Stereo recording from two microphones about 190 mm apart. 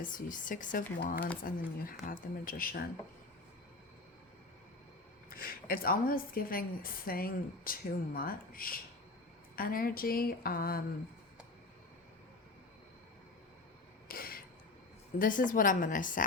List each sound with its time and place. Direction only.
0.0 s a woman's voice: 45° left (ahead or behind)
5.3 s a woman's voice: 50° left (ahead or behind)
14.1 s a sound: 50° left (ahead or behind)
15.2 s a woman's voice: 45° left (ahead or behind)